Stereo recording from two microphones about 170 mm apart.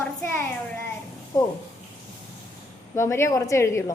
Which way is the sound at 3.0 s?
15° left (ahead or behind).